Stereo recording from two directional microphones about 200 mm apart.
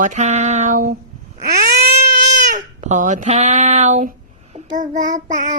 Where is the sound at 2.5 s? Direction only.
35° right (ahead or behind).